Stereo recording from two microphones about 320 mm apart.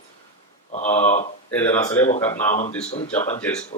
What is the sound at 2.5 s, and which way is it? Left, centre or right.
Speech, left.